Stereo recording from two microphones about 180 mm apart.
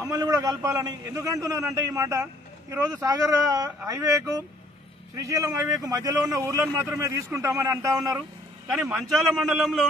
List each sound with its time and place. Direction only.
0.0 s a man's voice: 20° right (ahead or behind)
9.0 s a man's voice: centre (ahead or behind)